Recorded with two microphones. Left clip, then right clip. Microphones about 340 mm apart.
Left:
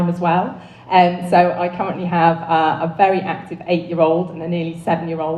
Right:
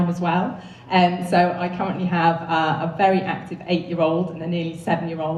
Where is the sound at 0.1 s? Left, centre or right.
Centre.